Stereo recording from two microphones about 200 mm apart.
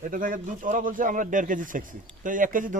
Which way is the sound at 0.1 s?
45° right (ahead or behind).